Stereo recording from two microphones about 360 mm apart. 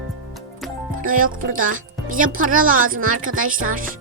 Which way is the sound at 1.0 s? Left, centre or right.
Right.